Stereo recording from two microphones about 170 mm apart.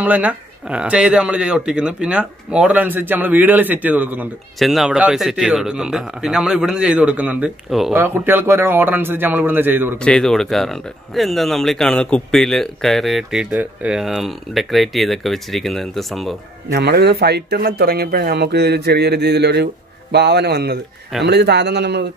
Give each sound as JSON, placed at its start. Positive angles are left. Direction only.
{"t": 0.0, "sound": "speech", "side_deg": -10}
{"t": 9.9, "sound": "speech", "side_deg": 5}
{"t": 16.7, "sound": "a man's voice", "side_deg": -75}